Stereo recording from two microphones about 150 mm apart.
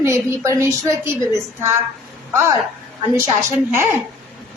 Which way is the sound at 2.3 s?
15° right (ahead or behind).